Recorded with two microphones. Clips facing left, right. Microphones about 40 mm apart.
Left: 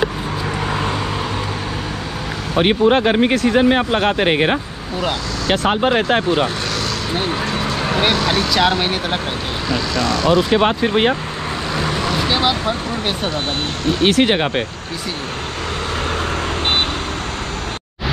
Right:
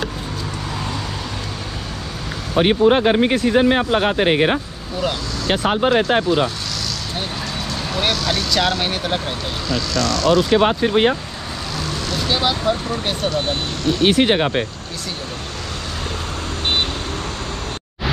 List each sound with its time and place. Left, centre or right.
2.6 s speech: left
7.2 s vehicle: left
8.0 s speech: left
10.6 s speech: left
11.7 s speech: left
14.0 s speech: left